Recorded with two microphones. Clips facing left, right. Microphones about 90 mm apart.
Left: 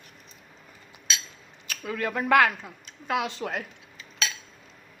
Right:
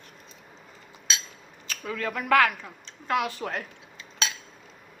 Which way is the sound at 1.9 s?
15° left (ahead or behind).